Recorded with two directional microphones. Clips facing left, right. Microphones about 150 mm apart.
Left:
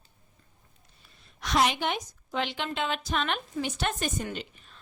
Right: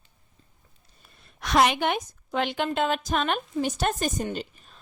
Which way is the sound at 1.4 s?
60° right (ahead or behind).